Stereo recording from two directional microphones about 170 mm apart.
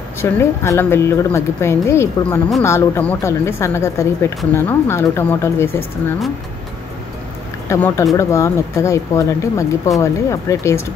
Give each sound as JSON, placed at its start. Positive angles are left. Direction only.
{"t": 0.2, "sound": "speech", "side_deg": 15}
{"t": 7.7, "sound": "speech", "side_deg": 15}